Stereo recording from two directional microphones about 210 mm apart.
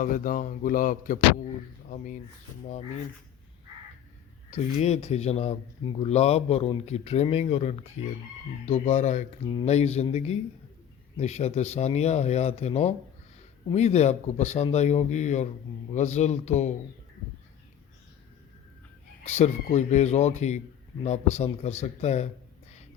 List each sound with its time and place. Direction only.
0.0 s a man's voice: 40° left (ahead or behind)
4.5 s a man's voice: 30° left (ahead or behind)
19.2 s a man's voice: 30° left (ahead or behind)